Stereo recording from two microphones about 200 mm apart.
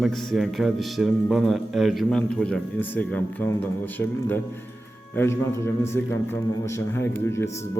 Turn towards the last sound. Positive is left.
turn(degrees=15)  # may be behind; listen again after turning